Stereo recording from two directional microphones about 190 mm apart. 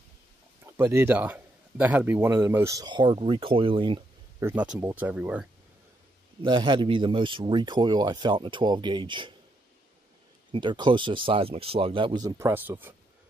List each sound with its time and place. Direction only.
0.7 s a man's voice: 15° right (ahead or behind)
4.4 s a man's voice: 10° right (ahead or behind)
6.4 s speech: 25° right (ahead or behind)
10.5 s speech: 25° right (ahead or behind)